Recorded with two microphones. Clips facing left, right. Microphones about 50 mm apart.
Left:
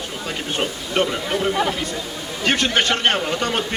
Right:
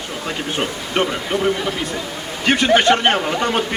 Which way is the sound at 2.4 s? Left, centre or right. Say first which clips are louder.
Right 5 dB; centre.